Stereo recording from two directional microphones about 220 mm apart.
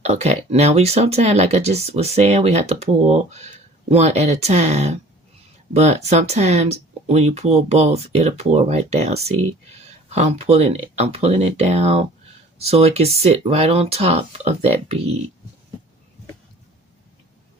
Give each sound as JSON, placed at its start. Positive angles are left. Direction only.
{"t": 0.0, "sound": "speech", "side_deg": -30}